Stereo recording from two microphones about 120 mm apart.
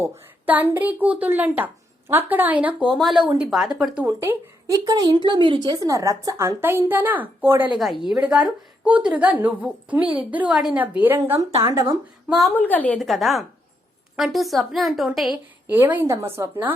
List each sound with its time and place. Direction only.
0.0 s speech: 15° right (ahead or behind)
2.9 s a woman's voice: centre (ahead or behind)
4.0 s a woman's voice: 20° right (ahead or behind)
4.9 s a woman's voice: 35° right (ahead or behind); by 10.8 s 5° right (ahead or behind)
11.0 s a woman's voice: 15° right (ahead or behind)
12.3 s a woman's voice: centre (ahead or behind)
12.5 s a woman's voice: 15° left (ahead or behind)
13.0 s a woman's voice: centre (ahead or behind)
15.7 s speech: 15° right (ahead or behind)